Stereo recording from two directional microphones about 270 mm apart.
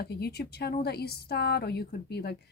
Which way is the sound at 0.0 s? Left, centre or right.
Left.